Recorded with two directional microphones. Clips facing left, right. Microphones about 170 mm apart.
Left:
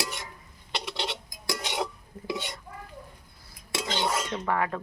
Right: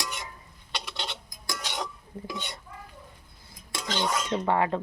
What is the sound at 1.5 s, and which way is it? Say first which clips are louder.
Cutlery: left 3 dB; 25° left (ahead or behind).